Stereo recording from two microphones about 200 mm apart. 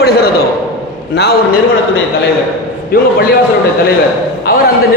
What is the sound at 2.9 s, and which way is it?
Speech, 50° left (ahead or behind).